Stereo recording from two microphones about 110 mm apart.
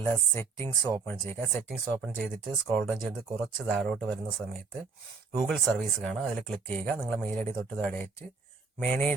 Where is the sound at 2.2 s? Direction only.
Centre (ahead or behind).